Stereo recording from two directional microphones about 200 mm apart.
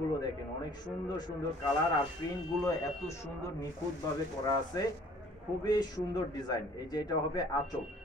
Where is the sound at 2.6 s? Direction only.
15° left (ahead or behind).